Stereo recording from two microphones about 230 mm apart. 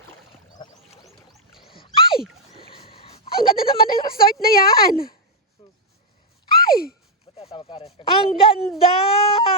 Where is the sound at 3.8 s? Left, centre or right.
Left.